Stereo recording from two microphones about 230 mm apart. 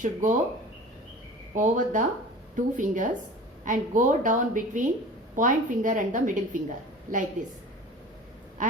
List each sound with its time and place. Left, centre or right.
0.0 s a woman's voice: right
1.5 s a woman's voice: right